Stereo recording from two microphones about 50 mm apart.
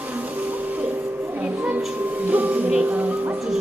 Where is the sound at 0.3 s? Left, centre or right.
Right.